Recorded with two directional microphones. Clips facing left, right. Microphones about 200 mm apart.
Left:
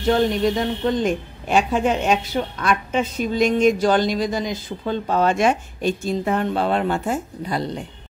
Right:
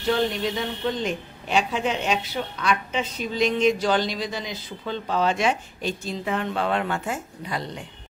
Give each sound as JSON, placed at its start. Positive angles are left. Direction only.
{"t": 0.1, "sound": "a woman's voice", "side_deg": 45}